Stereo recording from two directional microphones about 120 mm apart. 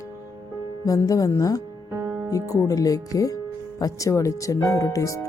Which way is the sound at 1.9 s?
25° right (ahead or behind).